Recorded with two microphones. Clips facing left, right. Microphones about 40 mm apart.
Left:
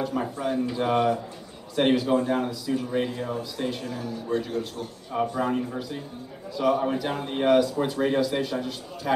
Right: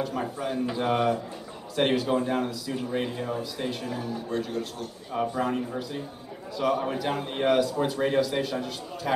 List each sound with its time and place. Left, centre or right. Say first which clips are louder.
0.0 s a man's voice: left 2 dB; centre
4.3 s a man's voice: left 5 dB; centre